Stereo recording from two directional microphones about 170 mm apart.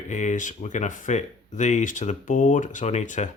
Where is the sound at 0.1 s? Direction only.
45° left (ahead or behind).